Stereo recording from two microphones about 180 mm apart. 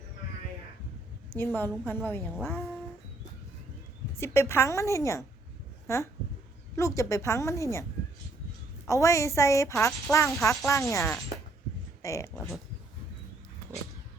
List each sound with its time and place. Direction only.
1.4 s a woman's voice: 10° left (ahead or behind)
4.2 s a woman's voice: 15° left (ahead or behind)
8.9 s a woman's voice: 15° left (ahead or behind)